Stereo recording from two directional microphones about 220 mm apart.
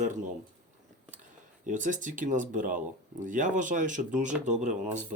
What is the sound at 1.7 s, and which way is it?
Speech, 35° right (ahead or behind).